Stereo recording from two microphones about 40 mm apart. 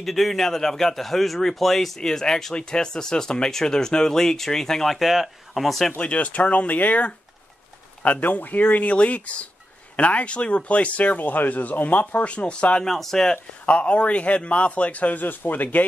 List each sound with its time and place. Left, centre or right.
0.0 s speech: centre
2.0 s speech: centre
4.9 s speech: centre
5.9 s speech: left
12.8 s speech: centre
13.7 s speech: left